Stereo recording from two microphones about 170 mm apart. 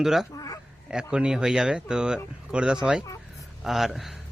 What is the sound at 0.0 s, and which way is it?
Speech, centre (ahead or behind).